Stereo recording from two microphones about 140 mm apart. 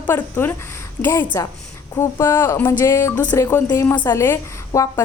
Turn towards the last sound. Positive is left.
turn(degrees=15)  # may be behind; listen again after turning